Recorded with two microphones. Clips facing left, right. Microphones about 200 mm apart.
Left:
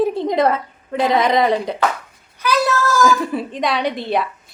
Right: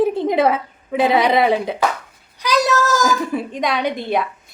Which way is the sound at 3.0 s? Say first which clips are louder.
Left 2 dB; centre (ahead or behind).